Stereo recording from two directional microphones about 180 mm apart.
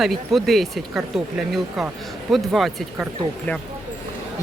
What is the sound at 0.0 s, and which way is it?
Speech, centre (ahead or behind).